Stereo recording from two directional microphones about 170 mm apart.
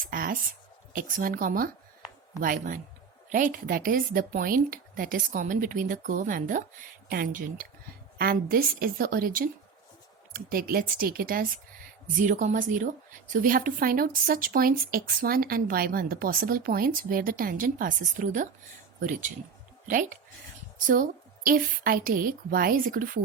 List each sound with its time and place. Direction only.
0.1 s a woman's voice: 60° right (ahead or behind)
19.9 s a woman's voice: 50° right (ahead or behind)